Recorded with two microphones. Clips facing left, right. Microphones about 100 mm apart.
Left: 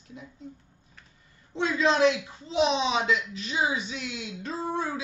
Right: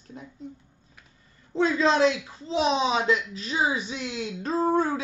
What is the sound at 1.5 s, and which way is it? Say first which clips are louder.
Speech: right 3 dB; 35° right (ahead or behind).